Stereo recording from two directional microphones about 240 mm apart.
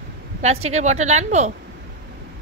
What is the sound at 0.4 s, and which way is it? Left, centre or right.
A woman's voice, right.